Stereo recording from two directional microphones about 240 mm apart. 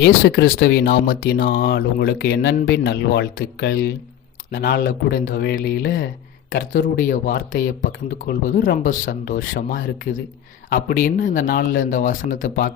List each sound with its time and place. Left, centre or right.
0.0 s speech: left